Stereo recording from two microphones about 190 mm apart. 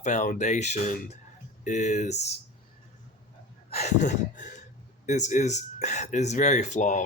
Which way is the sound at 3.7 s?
35° left (ahead or behind).